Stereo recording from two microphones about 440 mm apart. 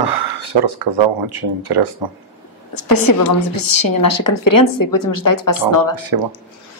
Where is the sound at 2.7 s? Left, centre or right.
Left.